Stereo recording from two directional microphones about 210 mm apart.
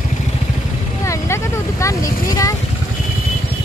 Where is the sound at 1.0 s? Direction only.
15° left (ahead or behind).